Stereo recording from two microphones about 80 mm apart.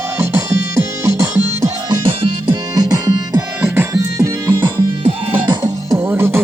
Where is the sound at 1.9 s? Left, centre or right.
Right.